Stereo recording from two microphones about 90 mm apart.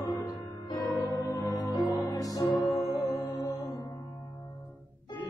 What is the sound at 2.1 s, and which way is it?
Music, 40° left (ahead or behind).